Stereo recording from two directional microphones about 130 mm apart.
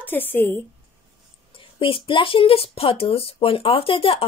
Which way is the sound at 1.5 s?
45° left (ahead or behind).